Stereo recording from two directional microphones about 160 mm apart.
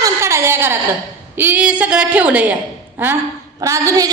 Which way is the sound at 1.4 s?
10° right (ahead or behind).